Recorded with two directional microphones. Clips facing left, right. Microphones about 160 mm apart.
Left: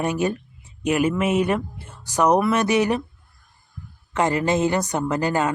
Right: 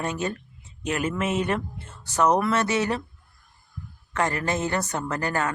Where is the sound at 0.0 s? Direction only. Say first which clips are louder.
Left 6 dB; 15° left (ahead or behind).